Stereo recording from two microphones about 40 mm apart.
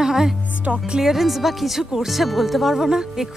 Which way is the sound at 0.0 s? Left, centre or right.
Centre.